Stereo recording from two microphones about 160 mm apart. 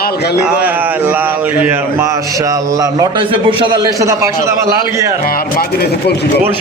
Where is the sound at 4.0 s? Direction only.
15° right (ahead or behind).